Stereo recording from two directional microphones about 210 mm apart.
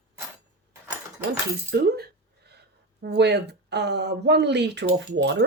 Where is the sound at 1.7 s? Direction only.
50° right (ahead or behind).